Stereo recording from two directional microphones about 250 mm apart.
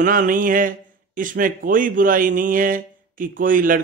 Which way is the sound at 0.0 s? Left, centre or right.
Right.